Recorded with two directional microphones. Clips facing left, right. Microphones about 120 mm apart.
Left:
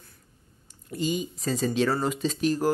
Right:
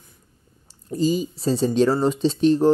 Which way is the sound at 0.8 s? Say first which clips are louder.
Right 7 dB; 35° right (ahead or behind).